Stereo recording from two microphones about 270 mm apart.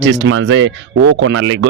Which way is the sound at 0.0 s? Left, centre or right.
Right.